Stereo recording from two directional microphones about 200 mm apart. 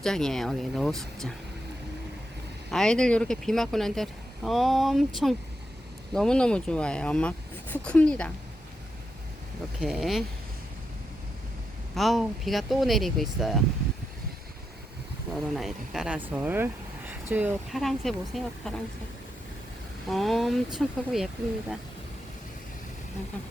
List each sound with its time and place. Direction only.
0.0 s speech: 5° left (ahead or behind)
2.6 s speech: 5° left (ahead or behind)
9.8 s speech: centre (ahead or behind)
11.9 s speech: centre (ahead or behind)
15.4 s speech: centre (ahead or behind)
20.1 s speech: centre (ahead or behind)